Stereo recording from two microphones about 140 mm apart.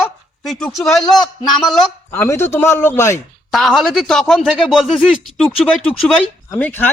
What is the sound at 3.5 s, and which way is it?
A man's voice, centre (ahead or behind).